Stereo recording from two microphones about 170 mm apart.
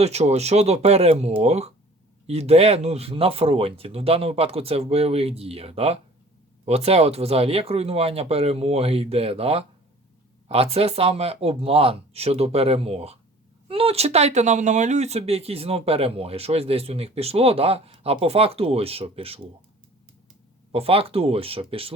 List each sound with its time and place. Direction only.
0.0 s speech: 40° right (ahead or behind)
20.7 s speech: 35° right (ahead or behind)